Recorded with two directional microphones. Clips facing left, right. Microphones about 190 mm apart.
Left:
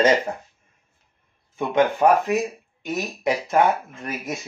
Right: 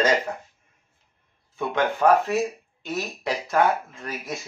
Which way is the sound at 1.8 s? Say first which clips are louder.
Left 2 dB; 20° left (ahead or behind).